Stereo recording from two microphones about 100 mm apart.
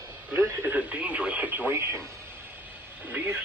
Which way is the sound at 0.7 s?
10° right (ahead or behind).